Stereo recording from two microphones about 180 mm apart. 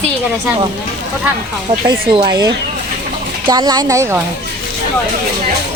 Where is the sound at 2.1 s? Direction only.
25° right (ahead or behind).